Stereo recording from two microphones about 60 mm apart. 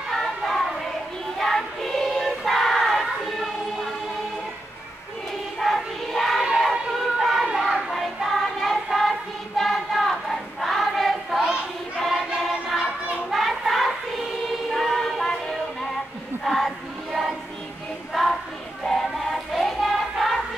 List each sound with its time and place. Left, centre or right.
0.1 s child singing: centre
1.4 s choir: centre
5.6 s choir: centre
6.4 s a sound: centre
9.6 s choir: centre
12.4 s music: centre
13.3 s child singing: centre
14.7 s music: centre
16.4 s choir: centre
18.1 s child singing: centre
18.9 s music: centre